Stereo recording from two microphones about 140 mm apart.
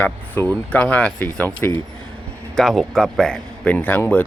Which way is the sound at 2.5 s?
Centre (ahead or behind).